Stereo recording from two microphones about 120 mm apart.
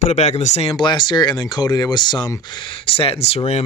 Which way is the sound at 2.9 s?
55° left (ahead or behind).